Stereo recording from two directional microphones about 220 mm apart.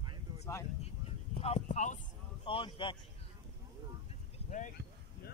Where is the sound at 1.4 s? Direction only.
30° left (ahead or behind).